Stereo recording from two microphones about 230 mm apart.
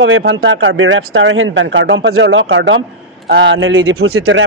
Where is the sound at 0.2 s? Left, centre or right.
Right.